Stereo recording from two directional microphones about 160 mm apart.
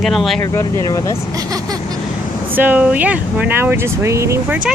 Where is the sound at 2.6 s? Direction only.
10° right (ahead or behind).